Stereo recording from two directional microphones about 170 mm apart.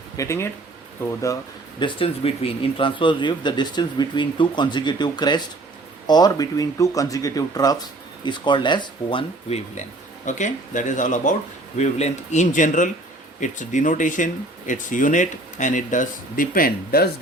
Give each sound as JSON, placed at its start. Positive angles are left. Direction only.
{"t": 0.2, "sound": "speech", "side_deg": 15}
{"t": 1.8, "sound": "a man's voice", "side_deg": 35}
{"t": 10.2, "sound": "speech", "side_deg": 45}